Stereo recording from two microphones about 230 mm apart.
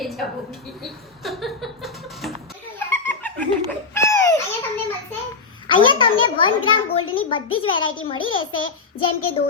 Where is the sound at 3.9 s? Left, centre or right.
Centre.